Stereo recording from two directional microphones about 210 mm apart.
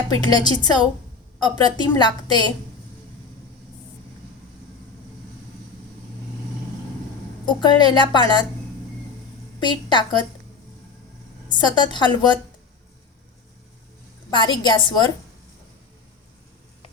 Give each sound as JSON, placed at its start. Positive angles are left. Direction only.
{"t": 0.1, "sound": "a woman's voice", "side_deg": 20}
{"t": 7.4, "sound": "a woman's voice", "side_deg": 20}
{"t": 9.6, "sound": "a woman's voice", "side_deg": 20}
{"t": 11.4, "sound": "a woman's voice", "side_deg": 20}
{"t": 14.3, "sound": "a woman's voice", "side_deg": 20}